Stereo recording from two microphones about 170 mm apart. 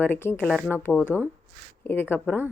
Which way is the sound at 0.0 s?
15° left (ahead or behind).